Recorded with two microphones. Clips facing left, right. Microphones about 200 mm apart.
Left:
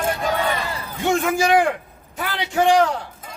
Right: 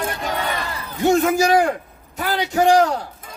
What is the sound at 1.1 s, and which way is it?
A man's voice, 40° right (ahead or behind).